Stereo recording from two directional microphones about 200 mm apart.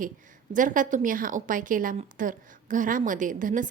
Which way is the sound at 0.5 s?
40° right (ahead or behind).